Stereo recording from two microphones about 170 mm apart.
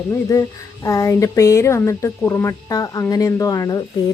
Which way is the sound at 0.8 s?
20° left (ahead or behind).